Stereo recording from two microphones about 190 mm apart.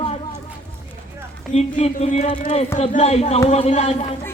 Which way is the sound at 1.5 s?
35° left (ahead or behind).